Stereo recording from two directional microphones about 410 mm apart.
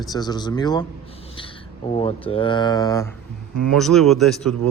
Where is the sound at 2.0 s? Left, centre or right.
Centre.